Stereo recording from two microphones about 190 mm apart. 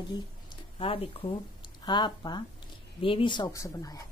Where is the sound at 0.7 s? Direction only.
30° left (ahead or behind).